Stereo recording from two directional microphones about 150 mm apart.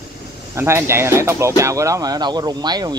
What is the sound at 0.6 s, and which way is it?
Speech, 15° right (ahead or behind).